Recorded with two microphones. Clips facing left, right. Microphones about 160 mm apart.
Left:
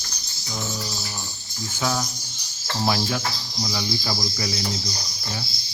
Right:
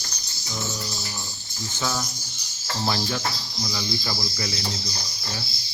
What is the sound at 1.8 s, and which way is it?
Speech, 5° left (ahead or behind).